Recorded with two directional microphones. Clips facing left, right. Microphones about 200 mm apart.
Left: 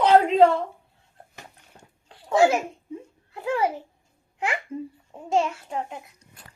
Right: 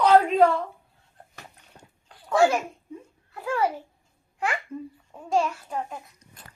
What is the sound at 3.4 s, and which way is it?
Speech, 20° left (ahead or behind).